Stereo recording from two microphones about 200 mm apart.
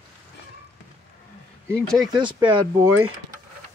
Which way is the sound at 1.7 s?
Centre (ahead or behind).